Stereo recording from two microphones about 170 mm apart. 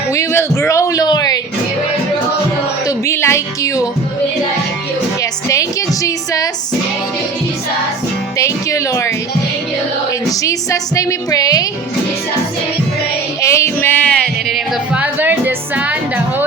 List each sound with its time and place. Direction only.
0.1 s a sound: 15° left (ahead or behind)
2.8 s music: 15° left (ahead or behind)
5.2 s music: 20° left (ahead or behind)
8.4 s speech: 20° left (ahead or behind)
10.2 s music: 20° left (ahead or behind)
13.4 s music: 15° left (ahead or behind); by 16.5 s 10° right (ahead or behind)